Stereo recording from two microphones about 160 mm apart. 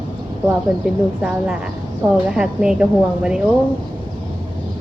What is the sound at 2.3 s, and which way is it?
A woman's voice, 5° right (ahead or behind).